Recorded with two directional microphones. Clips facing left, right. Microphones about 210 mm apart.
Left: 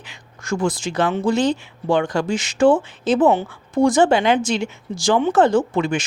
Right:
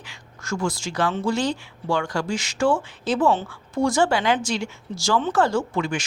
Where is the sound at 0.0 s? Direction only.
20° left (ahead or behind).